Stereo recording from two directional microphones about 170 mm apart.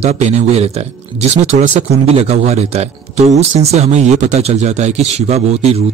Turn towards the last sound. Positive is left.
turn(degrees=-40)  # may be behind; listen again after turning